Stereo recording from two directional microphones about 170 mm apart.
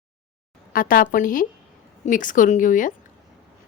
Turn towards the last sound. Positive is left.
turn(degrees=50)  # may be behind; listen again after turning